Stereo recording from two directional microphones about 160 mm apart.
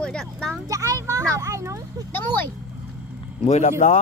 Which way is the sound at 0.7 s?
20° right (ahead or behind).